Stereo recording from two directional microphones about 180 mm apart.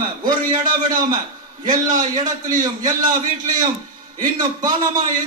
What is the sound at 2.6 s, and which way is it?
Speech, 20° right (ahead or behind).